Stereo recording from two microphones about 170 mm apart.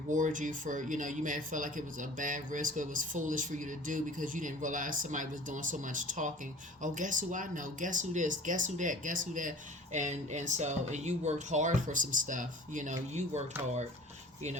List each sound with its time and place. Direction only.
0.1 s speech: 50° right (ahead or behind)